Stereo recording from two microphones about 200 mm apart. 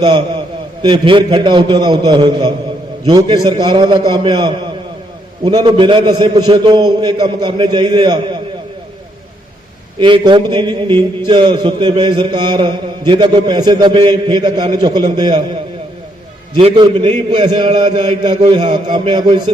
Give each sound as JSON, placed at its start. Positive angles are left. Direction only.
{"t": 0.8, "sound": "a man's voice", "side_deg": -25}
{"t": 10.0, "sound": "a man's voice", "side_deg": -25}
{"t": 16.6, "sound": "a man's voice", "side_deg": -25}
{"t": 17.7, "sound": "a sound", "side_deg": -35}
{"t": 18.2, "sound": "a man's voice", "side_deg": -20}